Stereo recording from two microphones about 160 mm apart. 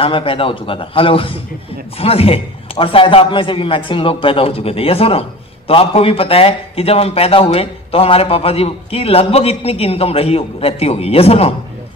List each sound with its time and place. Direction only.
0.0 s a man's voice: 35° left (ahead or behind)